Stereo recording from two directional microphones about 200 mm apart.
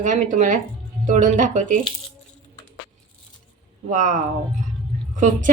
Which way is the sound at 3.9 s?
40° right (ahead or behind).